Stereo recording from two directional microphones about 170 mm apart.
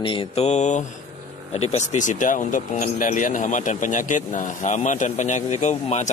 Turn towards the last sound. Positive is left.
turn(degrees=45)  # may be behind; listen again after turning